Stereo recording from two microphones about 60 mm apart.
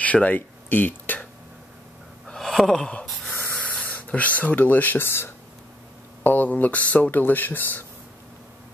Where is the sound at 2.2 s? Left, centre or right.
Centre.